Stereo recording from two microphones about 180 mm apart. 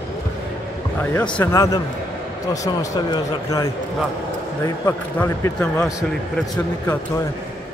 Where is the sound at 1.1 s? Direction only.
10° left (ahead or behind).